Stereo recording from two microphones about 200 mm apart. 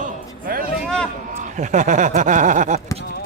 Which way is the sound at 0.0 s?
45° right (ahead or behind).